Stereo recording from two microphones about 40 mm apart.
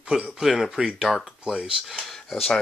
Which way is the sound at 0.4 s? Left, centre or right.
Centre.